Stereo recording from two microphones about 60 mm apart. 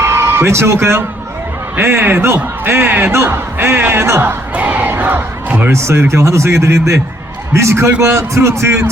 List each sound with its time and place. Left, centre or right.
0.0 s speech: right
1.7 s a man's voice: right
3.1 s a man's voice: right
4.5 s battle cry: right
5.7 s speech: right